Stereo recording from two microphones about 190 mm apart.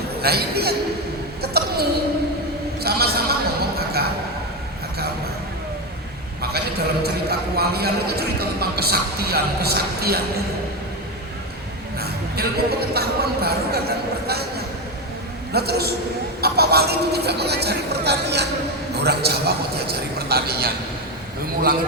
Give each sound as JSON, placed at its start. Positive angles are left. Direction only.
{"t": 0.2, "sound": "a man's voice", "side_deg": -55}
{"t": 1.4, "sound": "a sound", "side_deg": -55}
{"t": 6.4, "sound": "a man's voice", "side_deg": -55}
{"t": 11.9, "sound": "speech", "side_deg": -55}
{"t": 15.5, "sound": "a man's voice", "side_deg": -55}